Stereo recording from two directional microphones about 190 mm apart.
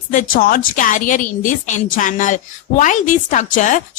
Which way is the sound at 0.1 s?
45° left (ahead or behind).